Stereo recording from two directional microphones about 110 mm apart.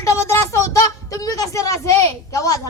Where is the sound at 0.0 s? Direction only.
25° left (ahead or behind).